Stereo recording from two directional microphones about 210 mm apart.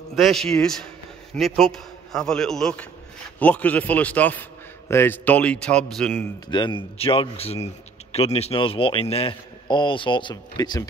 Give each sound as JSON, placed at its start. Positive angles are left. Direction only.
{"t": 0.1, "sound": "a man's voice", "side_deg": 0}
{"t": 6.5, "sound": "speech", "side_deg": 25}